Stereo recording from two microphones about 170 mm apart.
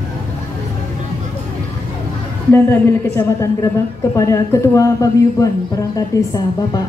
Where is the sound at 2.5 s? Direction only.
15° left (ahead or behind).